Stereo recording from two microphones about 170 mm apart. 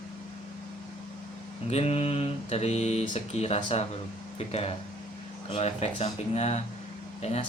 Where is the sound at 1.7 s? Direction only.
40° left (ahead or behind).